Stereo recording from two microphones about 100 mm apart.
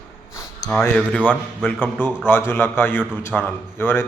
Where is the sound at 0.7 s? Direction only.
20° left (ahead or behind).